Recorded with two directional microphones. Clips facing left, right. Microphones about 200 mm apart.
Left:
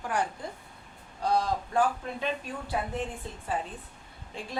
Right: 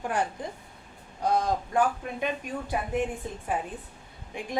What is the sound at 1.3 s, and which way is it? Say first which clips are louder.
A woman's voice: right 1 dB; 20° right (ahead or behind).